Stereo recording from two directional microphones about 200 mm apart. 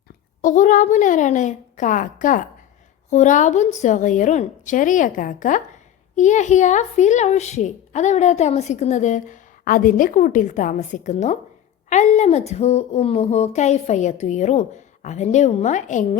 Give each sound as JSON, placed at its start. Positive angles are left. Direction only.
{"t": 0.4, "sound": "a woman's voice", "side_deg": 40}